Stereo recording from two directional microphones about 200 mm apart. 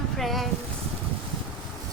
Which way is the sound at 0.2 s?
Centre (ahead or behind).